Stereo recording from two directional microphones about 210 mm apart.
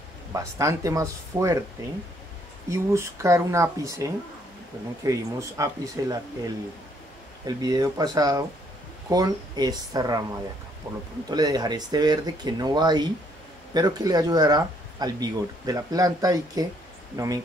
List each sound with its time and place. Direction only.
0.3 s speech: 15° right (ahead or behind)
2.7 s speech: 15° right (ahead or behind)
11.2 s speech: 20° right (ahead or behind)